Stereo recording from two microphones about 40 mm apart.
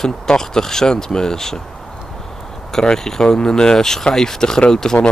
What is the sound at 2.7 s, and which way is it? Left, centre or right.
Speech, centre.